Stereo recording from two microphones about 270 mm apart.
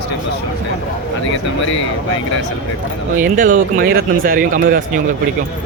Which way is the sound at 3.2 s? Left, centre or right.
Right.